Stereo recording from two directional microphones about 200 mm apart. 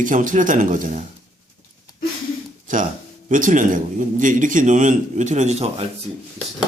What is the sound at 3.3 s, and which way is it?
Speech, 40° right (ahead or behind).